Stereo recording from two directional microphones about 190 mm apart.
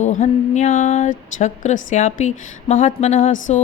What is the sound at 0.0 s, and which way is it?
Speech, 40° left (ahead or behind).